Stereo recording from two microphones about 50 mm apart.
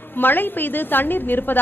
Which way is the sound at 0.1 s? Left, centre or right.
Left.